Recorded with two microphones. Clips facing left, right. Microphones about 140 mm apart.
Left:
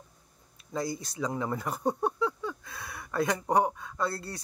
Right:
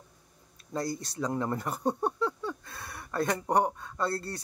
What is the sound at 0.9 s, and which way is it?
Speech, 5° left (ahead or behind).